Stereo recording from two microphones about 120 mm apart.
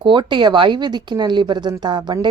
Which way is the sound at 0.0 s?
40° right (ahead or behind).